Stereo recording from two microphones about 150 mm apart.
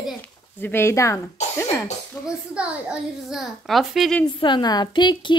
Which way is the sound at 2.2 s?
15° left (ahead or behind).